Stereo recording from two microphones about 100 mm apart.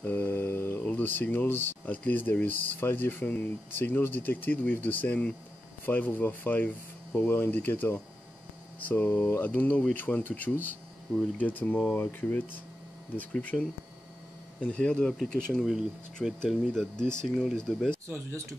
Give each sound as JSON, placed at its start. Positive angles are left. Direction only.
{"t": 0.0, "sound": "speech", "side_deg": 20}
{"t": 18.1, "sound": "speech", "side_deg": -30}